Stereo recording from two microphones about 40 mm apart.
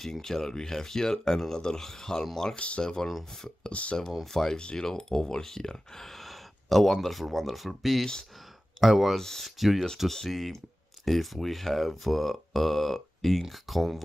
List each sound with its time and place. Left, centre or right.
0.0 s speech: centre
2.5 s speech: left
2.8 s speech: centre
3.1 s speech: centre
8.0 s speech: centre
8.8 s speech: centre
9.2 s speech: centre
9.6 s speech: centre